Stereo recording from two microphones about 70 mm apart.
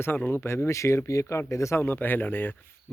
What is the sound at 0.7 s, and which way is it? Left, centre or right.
Speech, left.